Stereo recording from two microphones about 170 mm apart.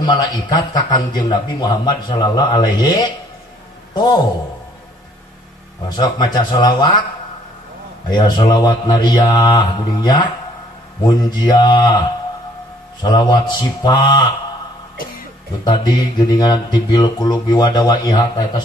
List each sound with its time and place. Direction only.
0.0 s a man's voice: 25° left (ahead or behind)
5.9 s a man's voice: 25° left (ahead or behind)
8.1 s a man's voice: 25° left (ahead or behind)
13.0 s a man's voice: 25° left (ahead or behind)
15.6 s a man's voice: 25° left (ahead or behind)